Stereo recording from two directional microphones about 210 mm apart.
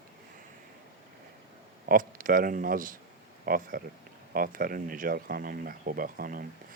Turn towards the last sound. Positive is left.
turn(degrees=-40)  # may be behind; listen again after turning